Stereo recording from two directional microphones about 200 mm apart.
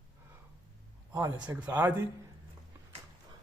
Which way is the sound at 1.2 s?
10° right (ahead or behind).